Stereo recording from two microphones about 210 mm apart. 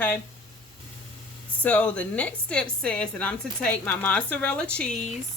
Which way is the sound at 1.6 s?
5° left (ahead or behind).